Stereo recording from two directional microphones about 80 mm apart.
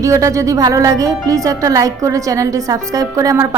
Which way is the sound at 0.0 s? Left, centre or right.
Right.